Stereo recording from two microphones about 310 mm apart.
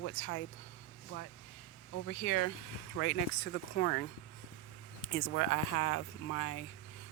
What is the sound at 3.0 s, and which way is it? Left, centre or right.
Speech, left.